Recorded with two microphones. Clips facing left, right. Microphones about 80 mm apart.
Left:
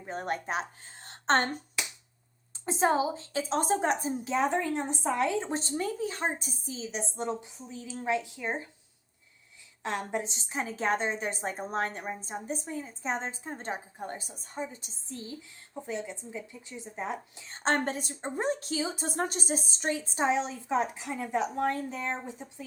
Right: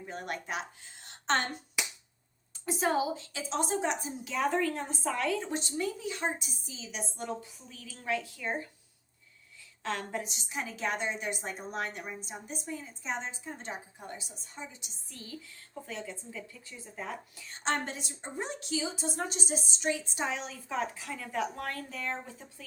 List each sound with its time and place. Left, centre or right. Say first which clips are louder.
0.0 s a woman's voice: left 5 dB; left
2.6 s a woman's voice: left 3 dB; left
9.8 s a woman's voice: left 3 dB; left
15.1 s a woman's voice: left 5 dB; left
17.6 s a woman's voice: left 4 dB; left